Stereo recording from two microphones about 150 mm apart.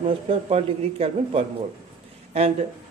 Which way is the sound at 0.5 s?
40° right (ahead or behind).